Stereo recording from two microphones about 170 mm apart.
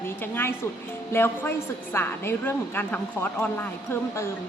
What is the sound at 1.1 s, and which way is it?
A woman's voice, 15° left (ahead or behind).